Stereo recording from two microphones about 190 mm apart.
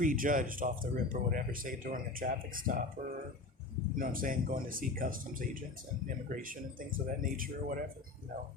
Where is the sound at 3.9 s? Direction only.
45° right (ahead or behind).